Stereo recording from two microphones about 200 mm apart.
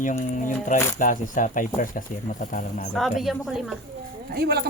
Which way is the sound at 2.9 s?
Centre (ahead or behind).